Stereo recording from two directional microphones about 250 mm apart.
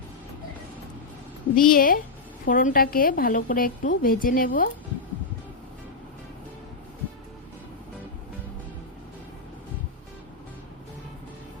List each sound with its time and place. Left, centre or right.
1.5 s a woman's voice: left